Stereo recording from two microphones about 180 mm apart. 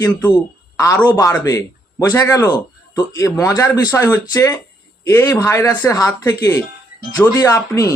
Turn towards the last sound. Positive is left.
turn(degrees=20)  # may be behind; listen again after turning